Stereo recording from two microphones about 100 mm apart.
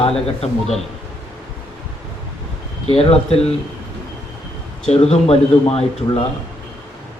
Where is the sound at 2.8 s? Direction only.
90° left.